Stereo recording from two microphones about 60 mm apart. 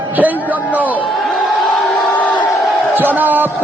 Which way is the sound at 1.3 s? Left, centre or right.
Centre.